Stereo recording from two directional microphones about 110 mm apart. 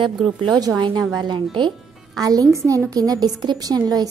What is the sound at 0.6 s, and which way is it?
A woman's voice, 35° right (ahead or behind).